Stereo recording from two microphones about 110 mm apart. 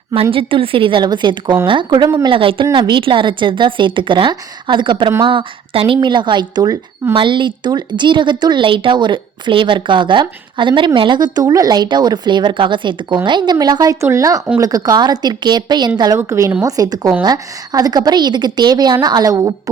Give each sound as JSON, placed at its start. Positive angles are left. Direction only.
{"t": 0.1, "sound": "a woman's voice", "side_deg": -55}
{"t": 7.1, "sound": "a woman's voice", "side_deg": -45}
{"t": 16.1, "sound": "speech", "side_deg": -25}
{"t": 16.6, "sound": "a woman's voice", "side_deg": -35}